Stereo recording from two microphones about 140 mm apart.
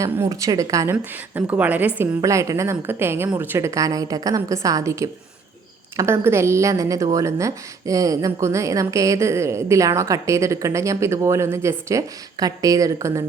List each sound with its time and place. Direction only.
0.0 s a woman's voice: 25° right (ahead or behind)
2.0 s a woman's voice: 20° right (ahead or behind)